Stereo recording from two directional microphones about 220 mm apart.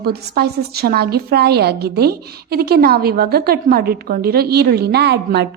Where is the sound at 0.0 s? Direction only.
45° right (ahead or behind).